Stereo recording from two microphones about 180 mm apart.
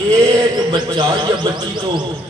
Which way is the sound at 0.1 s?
20° right (ahead or behind).